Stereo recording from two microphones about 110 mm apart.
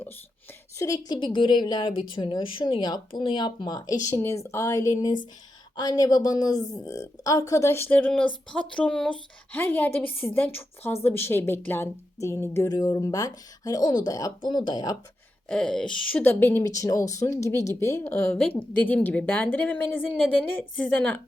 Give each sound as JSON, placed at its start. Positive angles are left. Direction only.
{"t": 0.8, "sound": "a woman's voice", "side_deg": 35}
{"t": 4.1, "sound": "a woman's voice", "side_deg": 25}
{"t": 15.4, "sound": "speech", "side_deg": 5}
{"t": 16.2, "sound": "a woman's voice", "side_deg": 20}
{"t": 16.7, "sound": "a woman's voice", "side_deg": 30}